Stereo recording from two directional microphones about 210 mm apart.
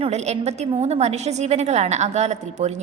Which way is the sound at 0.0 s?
30° right (ahead or behind).